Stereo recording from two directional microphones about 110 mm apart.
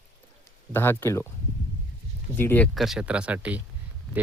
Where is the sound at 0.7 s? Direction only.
20° left (ahead or behind).